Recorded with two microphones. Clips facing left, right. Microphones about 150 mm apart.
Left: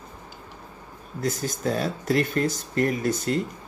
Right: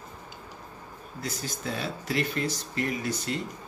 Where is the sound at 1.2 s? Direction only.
45° left (ahead or behind).